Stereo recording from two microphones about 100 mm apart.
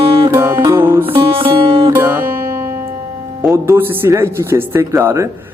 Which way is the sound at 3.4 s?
25° right (ahead or behind).